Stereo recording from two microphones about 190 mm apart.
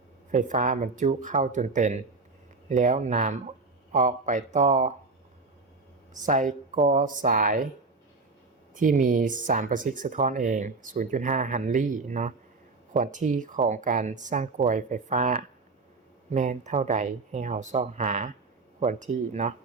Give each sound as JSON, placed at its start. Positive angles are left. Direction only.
{"t": 0.3, "sound": "speech", "side_deg": -40}
{"t": 6.1, "sound": "speech", "side_deg": -40}
{"t": 8.7, "sound": "speech", "side_deg": -45}